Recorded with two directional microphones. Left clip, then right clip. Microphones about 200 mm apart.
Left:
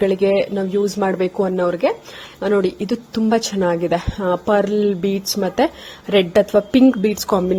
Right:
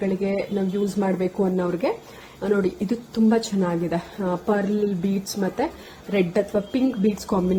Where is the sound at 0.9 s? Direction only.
35° left (ahead or behind).